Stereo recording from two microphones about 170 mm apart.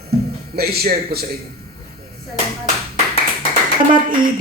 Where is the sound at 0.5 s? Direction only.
65° right (ahead or behind).